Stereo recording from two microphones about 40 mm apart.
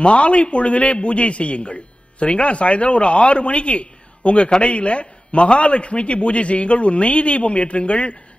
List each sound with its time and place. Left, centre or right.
0.0 s a man's voice: left